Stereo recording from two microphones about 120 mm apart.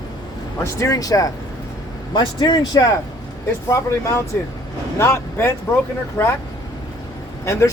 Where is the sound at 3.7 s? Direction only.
25° left (ahead or behind).